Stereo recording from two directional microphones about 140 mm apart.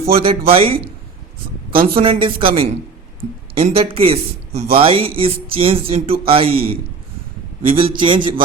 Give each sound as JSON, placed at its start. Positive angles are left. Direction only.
{"t": 0.2, "sound": "speech", "side_deg": -40}
{"t": 2.0, "sound": "speech", "side_deg": -40}